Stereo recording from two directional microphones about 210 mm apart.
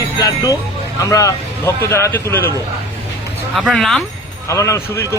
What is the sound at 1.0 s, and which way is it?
A man's voice, 15° left (ahead or behind).